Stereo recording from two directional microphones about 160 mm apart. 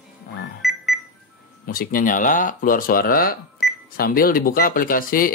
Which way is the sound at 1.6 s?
60° left (ahead or behind).